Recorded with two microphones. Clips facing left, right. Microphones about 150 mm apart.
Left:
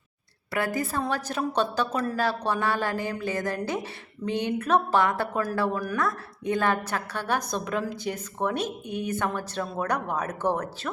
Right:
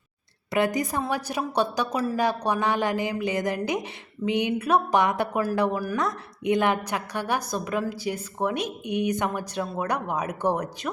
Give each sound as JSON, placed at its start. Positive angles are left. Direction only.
{"t": 0.5, "sound": "a woman's voice", "side_deg": -20}